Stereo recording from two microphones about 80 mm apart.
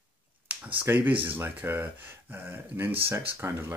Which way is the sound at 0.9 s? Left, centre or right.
Right.